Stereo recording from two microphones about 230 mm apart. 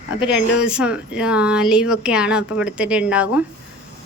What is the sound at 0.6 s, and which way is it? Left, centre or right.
Speech, centre.